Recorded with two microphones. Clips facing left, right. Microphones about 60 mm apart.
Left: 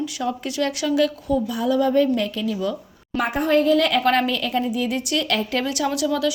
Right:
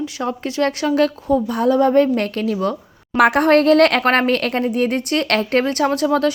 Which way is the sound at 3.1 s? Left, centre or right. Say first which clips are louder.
Right 7 dB; right.